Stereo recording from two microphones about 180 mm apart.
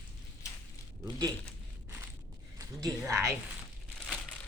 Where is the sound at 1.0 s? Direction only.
20° right (ahead or behind).